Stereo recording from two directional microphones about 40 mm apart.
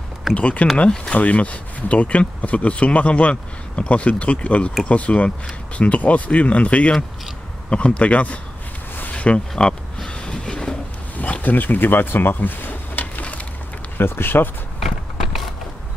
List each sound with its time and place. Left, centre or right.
0.3 s speech: left
1.1 s speech: left
9.1 s a sound: left
11.1 s a sound: left
11.4 s speech: left
13.9 s speech: left
14.8 s walk: centre